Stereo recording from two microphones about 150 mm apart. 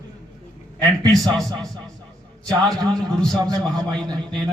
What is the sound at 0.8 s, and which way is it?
Speech, 25° right (ahead or behind).